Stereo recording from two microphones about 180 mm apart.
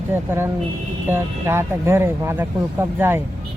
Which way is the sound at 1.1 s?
15° right (ahead or behind).